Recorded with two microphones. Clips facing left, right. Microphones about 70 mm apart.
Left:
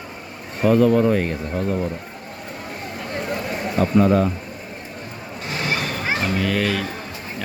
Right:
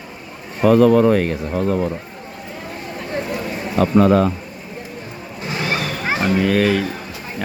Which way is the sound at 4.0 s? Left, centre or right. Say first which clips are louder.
Right 3 dB; right.